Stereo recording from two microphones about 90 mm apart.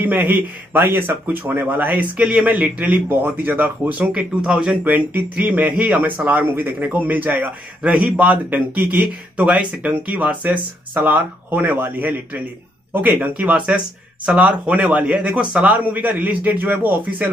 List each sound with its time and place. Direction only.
0.3 s speech: 20° right (ahead or behind)